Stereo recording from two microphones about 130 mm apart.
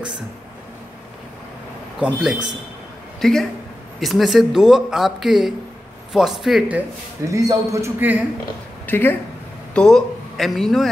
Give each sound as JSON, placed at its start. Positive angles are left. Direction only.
{"t": 2.1, "sound": "speech", "side_deg": -5}
{"t": 7.2, "sound": "a man's voice", "side_deg": -25}
{"t": 8.8, "sound": "speech", "side_deg": 15}
{"t": 9.8, "sound": "speech", "side_deg": 5}